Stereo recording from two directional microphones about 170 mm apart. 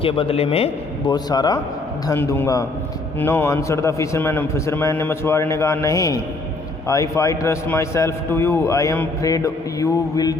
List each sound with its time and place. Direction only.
0.0 s a man's voice: 30° left (ahead or behind)
1.1 s a man's voice: 25° left (ahead or behind)
2.0 s a man's voice: 10° left (ahead or behind)